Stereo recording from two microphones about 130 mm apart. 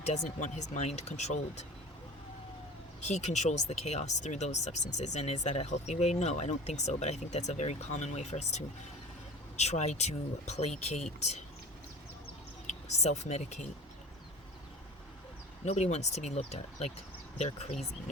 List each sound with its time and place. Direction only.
0.0 s speech: 60° left (ahead or behind)
3.1 s speech: 60° left (ahead or behind)
12.6 s speech: 60° left (ahead or behind)
15.6 s speech: 55° left (ahead or behind)